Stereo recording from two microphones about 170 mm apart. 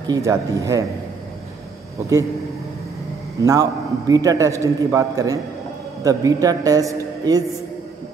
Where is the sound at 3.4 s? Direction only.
20° right (ahead or behind).